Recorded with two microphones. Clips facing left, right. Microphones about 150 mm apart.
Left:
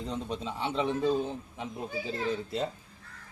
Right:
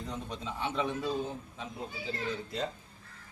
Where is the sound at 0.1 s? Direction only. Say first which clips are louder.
Left 5 dB; 25° left (ahead or behind).